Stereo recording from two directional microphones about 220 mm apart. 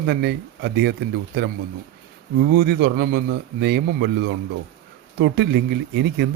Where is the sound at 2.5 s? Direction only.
50° right (ahead or behind).